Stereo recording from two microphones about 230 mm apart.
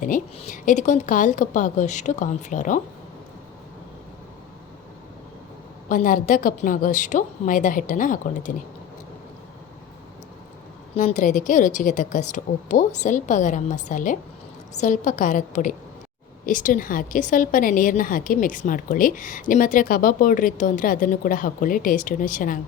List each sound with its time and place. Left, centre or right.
0.0 s a woman's voice: left
5.9 s a woman's voice: left
10.9 s a woman's voice: left